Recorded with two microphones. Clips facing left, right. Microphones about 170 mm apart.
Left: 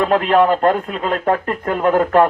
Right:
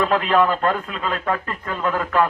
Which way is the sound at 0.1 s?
50° left (ahead or behind).